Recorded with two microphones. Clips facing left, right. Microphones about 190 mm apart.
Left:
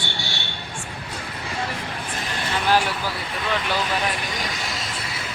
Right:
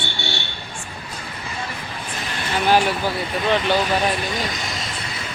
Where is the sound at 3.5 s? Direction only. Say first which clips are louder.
Right 6 dB; 25° right (ahead or behind).